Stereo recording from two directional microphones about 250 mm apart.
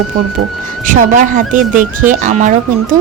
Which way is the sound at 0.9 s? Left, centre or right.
Right.